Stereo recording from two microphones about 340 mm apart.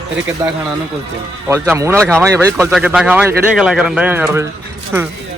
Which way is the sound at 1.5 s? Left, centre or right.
Centre.